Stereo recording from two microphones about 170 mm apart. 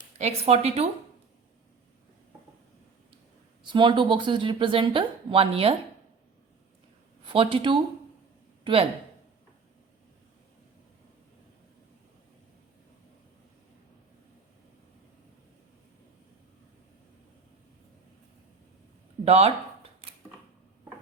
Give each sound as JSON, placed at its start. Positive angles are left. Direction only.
{"t": 0.2, "sound": "speech", "side_deg": -40}
{"t": 3.7, "sound": "speech", "side_deg": -30}
{"t": 7.3, "sound": "speech", "side_deg": -30}
{"t": 19.2, "sound": "a sound", "side_deg": -40}